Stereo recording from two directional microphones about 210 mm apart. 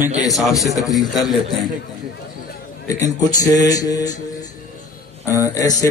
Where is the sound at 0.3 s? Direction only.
Centre (ahead or behind).